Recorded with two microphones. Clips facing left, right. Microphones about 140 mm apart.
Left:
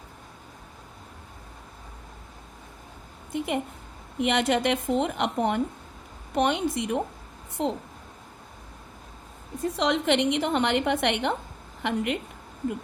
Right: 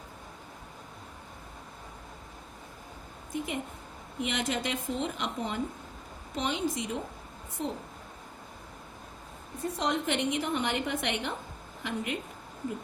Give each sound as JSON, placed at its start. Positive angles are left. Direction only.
{"t": 3.3, "sound": "a woman's voice", "side_deg": 65}
{"t": 7.6, "sound": "a woman's voice", "side_deg": 75}
{"t": 9.7, "sound": "a woman's voice", "side_deg": 85}